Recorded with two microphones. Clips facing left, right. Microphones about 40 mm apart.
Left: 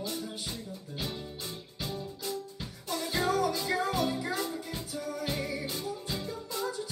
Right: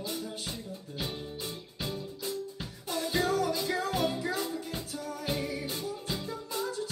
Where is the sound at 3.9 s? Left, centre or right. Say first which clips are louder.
Right 1 dB; right.